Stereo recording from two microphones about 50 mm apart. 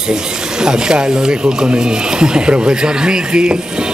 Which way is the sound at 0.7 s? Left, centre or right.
Centre.